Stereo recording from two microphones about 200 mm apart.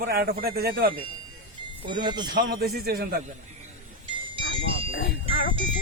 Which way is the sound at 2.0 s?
20° right (ahead or behind).